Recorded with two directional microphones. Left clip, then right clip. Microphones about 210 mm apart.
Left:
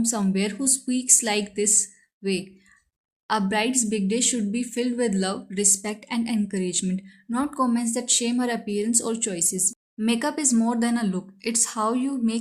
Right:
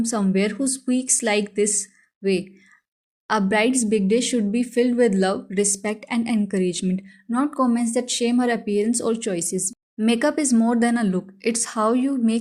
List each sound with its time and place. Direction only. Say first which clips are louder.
0.0 s a woman's voice: right 3 dB; 15° right (ahead or behind)